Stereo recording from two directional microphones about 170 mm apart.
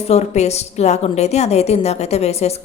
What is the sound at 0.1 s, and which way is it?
A woman's voice, 40° left (ahead or behind).